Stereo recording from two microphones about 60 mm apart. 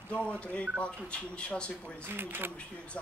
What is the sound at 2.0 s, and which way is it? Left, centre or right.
Speech, right.